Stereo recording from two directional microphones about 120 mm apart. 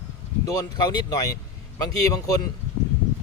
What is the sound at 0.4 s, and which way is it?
Speech, 35° left (ahead or behind).